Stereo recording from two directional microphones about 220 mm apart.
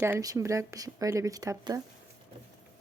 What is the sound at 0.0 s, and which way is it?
Speech, 15° right (ahead or behind).